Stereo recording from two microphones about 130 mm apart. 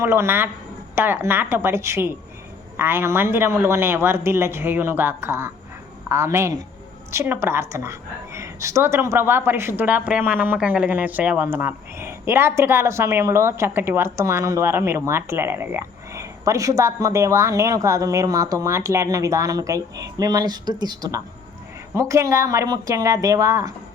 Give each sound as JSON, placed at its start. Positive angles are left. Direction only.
{"t": 0.0, "sound": "a woman's voice", "side_deg": -20}